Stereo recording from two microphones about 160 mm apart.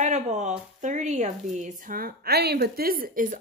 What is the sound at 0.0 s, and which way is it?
A woman's voice, 45° right (ahead or behind).